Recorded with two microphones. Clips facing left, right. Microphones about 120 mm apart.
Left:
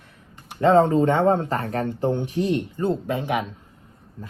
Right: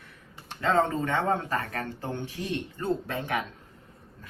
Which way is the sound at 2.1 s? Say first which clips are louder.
Left 10 dB; 15° left (ahead or behind).